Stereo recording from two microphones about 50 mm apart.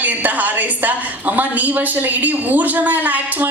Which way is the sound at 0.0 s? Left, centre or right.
Right.